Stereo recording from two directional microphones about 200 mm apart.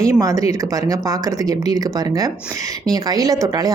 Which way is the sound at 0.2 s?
15° right (ahead or behind).